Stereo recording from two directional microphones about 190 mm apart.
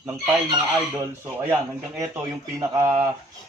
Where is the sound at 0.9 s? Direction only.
10° right (ahead or behind).